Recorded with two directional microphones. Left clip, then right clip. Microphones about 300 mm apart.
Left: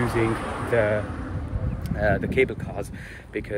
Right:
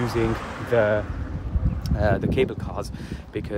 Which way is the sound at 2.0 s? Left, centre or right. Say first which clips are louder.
Even; centre.